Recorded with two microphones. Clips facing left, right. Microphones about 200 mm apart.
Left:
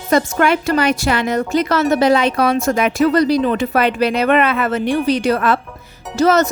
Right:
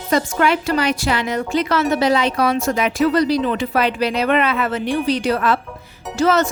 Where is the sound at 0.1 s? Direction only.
50° left (ahead or behind).